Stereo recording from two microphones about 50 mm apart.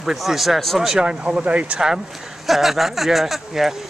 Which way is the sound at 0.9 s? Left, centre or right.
Centre.